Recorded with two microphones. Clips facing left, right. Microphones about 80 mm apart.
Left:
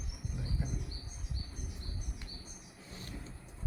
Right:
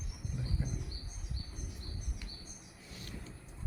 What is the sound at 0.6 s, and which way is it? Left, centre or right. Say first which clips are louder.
Bird: left 2 dB; centre.